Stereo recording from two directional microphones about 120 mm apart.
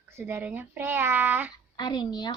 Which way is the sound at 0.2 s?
20° right (ahead or behind).